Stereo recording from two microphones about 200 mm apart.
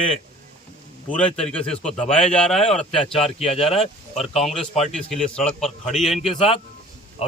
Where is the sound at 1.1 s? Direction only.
5° left (ahead or behind).